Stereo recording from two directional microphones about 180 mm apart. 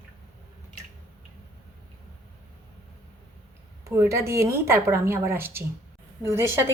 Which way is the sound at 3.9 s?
15° right (ahead or behind).